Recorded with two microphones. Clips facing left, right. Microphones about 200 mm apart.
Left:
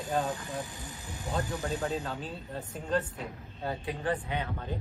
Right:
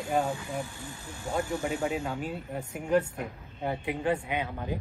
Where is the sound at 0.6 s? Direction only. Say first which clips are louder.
Right 2 dB; 15° left (ahead or behind).